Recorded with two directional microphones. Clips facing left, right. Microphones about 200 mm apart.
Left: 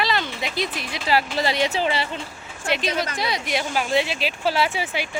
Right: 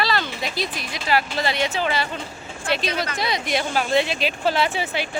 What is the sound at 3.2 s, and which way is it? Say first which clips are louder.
Speech: right 1 dB; 10° left (ahead or behind).